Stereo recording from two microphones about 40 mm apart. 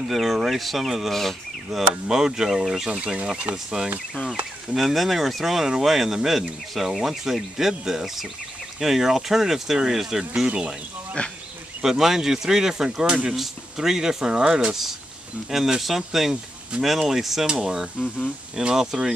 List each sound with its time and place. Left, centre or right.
0.1 s speech: centre
4.7 s speech: centre
11.2 s speech: left
11.8 s speech: centre
15.5 s speech: centre
18.2 s speech: right